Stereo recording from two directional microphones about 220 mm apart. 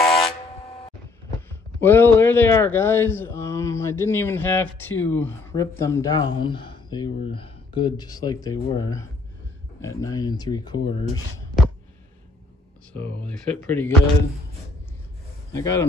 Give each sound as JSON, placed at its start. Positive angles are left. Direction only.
{"t": 0.0, "sound": "buzzer", "side_deg": 0}
{"t": 1.5, "sound": "a man's voice", "side_deg": 10}
{"t": 13.7, "sound": "a man's voice", "side_deg": 10}
{"t": 15.5, "sound": "a man's voice", "side_deg": 10}